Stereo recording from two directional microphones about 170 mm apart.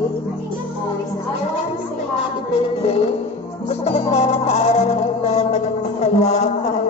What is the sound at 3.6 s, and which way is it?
Speech, 40° left (ahead or behind).